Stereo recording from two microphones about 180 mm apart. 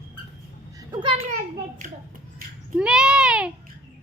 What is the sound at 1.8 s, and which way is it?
Speech, 45° right (ahead or behind).